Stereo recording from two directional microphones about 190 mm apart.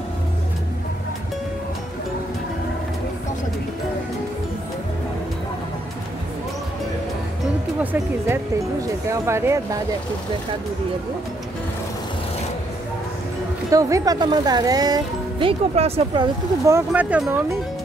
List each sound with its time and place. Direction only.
7.8 s speech: 10° right (ahead or behind)
13.7 s speech: 15° right (ahead or behind)
16.6 s speech: 10° right (ahead or behind)